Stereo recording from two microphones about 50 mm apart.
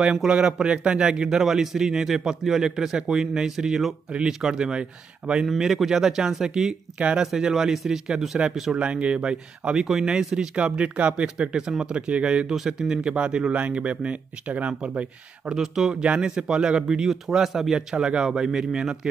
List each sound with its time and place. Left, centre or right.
0.0 s a man's voice: centre
5.6 s a man's voice: centre
7.2 s a man's voice: centre
8.7 s speech: right
9.8 s a man's voice: centre
12.5 s speech: centre; by 15.0 s right
15.4 s a man's voice: centre
16.0 s a man's voice: right